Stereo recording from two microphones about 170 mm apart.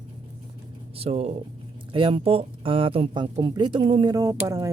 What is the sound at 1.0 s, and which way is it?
Speech, 35° right (ahead or behind).